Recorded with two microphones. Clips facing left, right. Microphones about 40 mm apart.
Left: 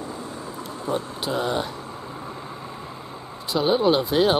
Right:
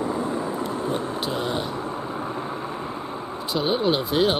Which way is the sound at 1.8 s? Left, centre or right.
Right.